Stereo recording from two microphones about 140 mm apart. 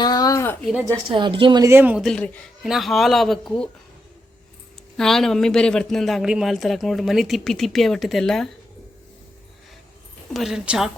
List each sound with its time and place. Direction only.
0.0 s a sound: 25° left (ahead or behind)
0.9 s a woman's voice: 35° right (ahead or behind)
1.6 s speech: 15° right (ahead or behind)
2.0 s a man's voice: 5° left (ahead or behind)
4.9 s a man's voice: 5° left (ahead or behind)
10.3 s a man's voice: centre (ahead or behind)